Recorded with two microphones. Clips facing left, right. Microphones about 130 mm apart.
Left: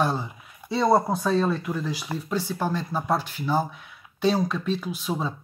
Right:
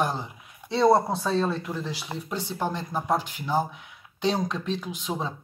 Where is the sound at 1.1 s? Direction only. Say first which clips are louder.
Left 2 dB; 30° right (ahead or behind).